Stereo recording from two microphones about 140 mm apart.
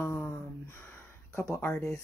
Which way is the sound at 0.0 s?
20° left (ahead or behind).